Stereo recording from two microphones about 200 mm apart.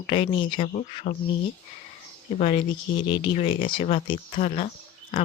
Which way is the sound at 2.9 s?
25° left (ahead or behind).